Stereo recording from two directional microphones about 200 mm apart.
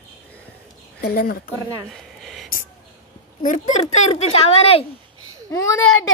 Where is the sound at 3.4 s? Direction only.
40° left (ahead or behind).